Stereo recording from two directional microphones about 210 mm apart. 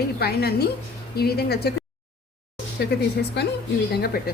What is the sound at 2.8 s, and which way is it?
A woman's voice, 50° left (ahead or behind).